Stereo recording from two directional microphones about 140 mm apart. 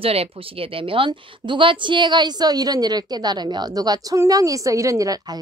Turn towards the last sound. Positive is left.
turn(degrees=-25)  # may be behind; listen again after turning